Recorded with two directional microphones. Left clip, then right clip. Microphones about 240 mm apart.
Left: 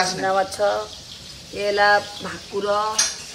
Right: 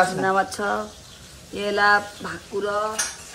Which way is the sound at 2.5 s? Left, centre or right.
Centre.